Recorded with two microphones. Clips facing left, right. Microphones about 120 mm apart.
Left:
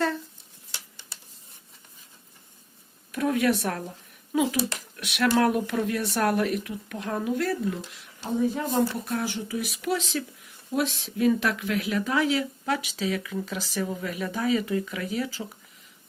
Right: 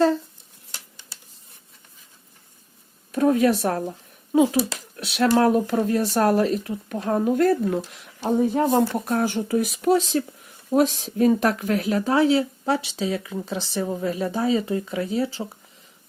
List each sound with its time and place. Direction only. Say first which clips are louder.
3.1 s speech: right 5 dB; 35° right (ahead or behind); by 8.9 s 80° right
8.9 s speech: right 6 dB; 50° right (ahead or behind); by 15.5 s 30° right (ahead or behind)